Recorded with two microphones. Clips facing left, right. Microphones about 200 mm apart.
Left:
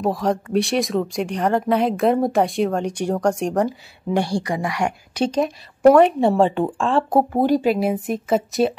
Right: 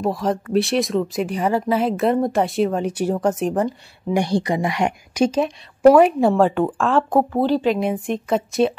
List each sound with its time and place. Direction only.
0.0 s speech: centre (ahead or behind)
4.2 s a woman's voice: 20° right (ahead or behind)
5.3 s speech: centre (ahead or behind)
7.1 s speech: 20° left (ahead or behind); by 8.7 s centre (ahead or behind)